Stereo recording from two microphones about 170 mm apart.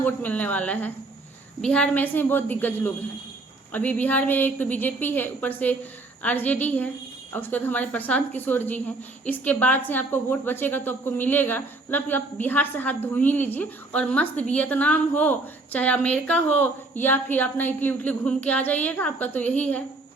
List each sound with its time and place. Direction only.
0.0 s a woman's voice: 10° left (ahead or behind)